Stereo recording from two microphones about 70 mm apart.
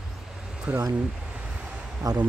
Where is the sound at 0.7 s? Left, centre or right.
Centre.